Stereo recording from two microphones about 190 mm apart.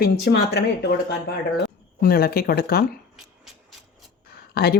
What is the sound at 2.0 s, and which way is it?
Speech, 50° left (ahead or behind).